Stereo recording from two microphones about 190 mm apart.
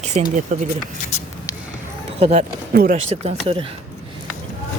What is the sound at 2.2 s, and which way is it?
Speech, 35° right (ahead or behind).